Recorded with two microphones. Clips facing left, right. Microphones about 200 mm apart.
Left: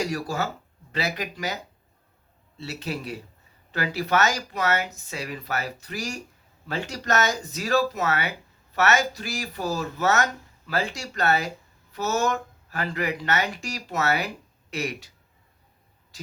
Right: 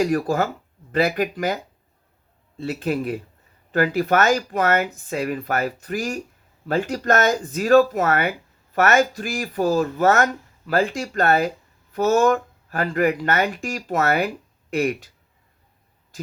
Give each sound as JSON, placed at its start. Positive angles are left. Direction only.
{"t": 0.0, "sound": "speech", "side_deg": -50}
{"t": 2.6, "sound": "speech", "side_deg": -50}